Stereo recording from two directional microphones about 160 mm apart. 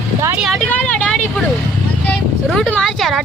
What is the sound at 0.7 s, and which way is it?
Vehicle, 10° left (ahead or behind).